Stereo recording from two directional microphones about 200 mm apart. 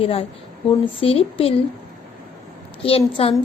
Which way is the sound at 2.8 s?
30° left (ahead or behind).